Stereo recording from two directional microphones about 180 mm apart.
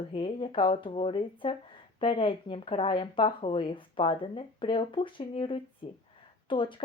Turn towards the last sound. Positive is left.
turn(degrees=30)  # may be behind; listen again after turning